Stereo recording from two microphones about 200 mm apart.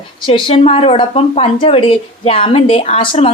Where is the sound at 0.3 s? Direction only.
25° left (ahead or behind).